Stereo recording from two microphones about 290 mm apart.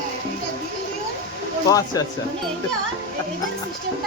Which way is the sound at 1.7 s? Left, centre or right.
Centre.